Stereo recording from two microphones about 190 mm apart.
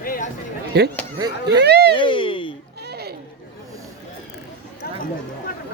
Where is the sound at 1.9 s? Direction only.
25° left (ahead or behind).